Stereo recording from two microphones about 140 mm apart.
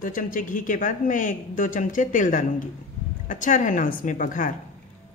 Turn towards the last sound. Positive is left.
turn(degrees=65)  # may be behind; listen again after turning